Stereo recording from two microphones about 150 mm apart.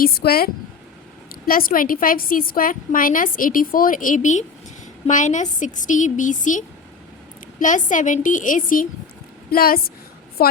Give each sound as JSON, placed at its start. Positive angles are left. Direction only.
{"t": 0.0, "sound": "speech", "side_deg": 90}
{"t": 1.3, "sound": "a woman's voice", "side_deg": 75}
{"t": 9.5, "sound": "a woman's voice", "side_deg": 80}